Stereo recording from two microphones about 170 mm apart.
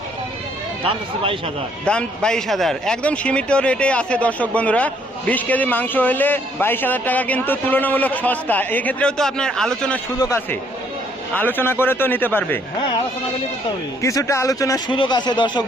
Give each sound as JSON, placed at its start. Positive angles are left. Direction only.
{"t": 1.8, "sound": "speech", "side_deg": 5}
{"t": 10.2, "sound": "speech", "side_deg": 15}
{"t": 14.0, "sound": "a man's voice", "side_deg": 20}